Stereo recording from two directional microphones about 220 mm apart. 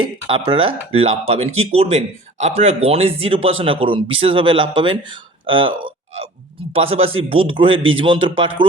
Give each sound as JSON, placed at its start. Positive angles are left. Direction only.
{"t": 0.0, "sound": "speech", "side_deg": -20}